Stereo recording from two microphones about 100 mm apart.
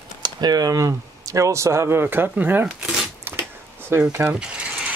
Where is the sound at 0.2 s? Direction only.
45° right (ahead or behind); by 3.0 s 15° right (ahead or behind).